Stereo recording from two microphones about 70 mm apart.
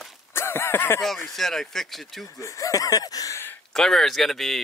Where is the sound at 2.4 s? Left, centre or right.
Left.